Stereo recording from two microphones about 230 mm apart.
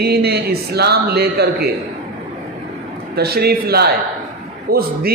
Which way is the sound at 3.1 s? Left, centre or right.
Right.